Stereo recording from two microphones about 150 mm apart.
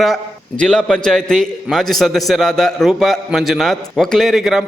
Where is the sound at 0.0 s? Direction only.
5° left (ahead or behind).